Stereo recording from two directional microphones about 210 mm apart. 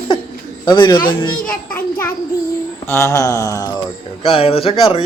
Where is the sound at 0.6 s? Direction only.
20° left (ahead or behind).